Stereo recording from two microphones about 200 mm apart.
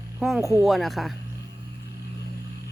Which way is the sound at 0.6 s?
Centre (ahead or behind).